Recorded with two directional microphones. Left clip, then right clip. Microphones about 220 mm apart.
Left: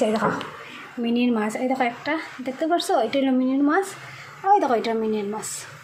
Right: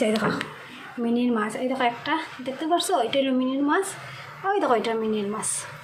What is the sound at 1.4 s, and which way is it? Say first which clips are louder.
A woman's voice: left 1 dB; 20° left (ahead or behind).